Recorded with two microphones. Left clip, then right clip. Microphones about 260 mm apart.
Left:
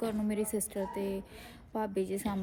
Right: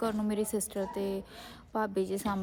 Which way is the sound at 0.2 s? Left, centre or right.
Centre.